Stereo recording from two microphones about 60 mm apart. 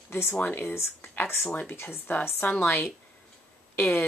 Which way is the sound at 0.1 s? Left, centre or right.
Left.